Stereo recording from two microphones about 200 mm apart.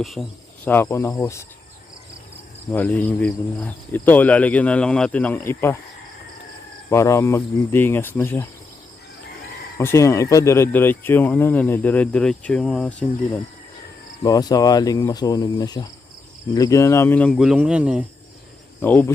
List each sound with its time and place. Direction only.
0.0 s speech: centre (ahead or behind)
2.7 s speech: 10° left (ahead or behind)
6.9 s speech: 15° left (ahead or behind)
9.7 s speech: 15° left (ahead or behind)
14.3 s speech: 20° left (ahead or behind); by 18.0 s 5° right (ahead or behind)
18.8 s speech: 10° left (ahead or behind)